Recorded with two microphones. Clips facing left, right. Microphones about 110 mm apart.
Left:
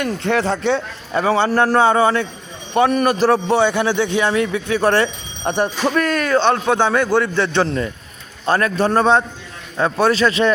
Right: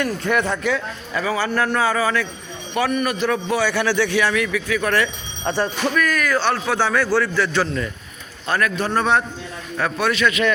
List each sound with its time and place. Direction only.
0.3 s a man's voice: 30° left (ahead or behind)
5.5 s a man's voice: 20° left (ahead or behind)
5.9 s a man's voice: 30° left (ahead or behind)